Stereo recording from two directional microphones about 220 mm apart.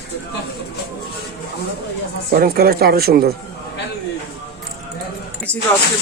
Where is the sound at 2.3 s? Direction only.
45° right (ahead or behind).